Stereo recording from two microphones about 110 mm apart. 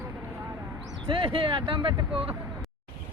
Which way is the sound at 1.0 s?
50° right (ahead or behind).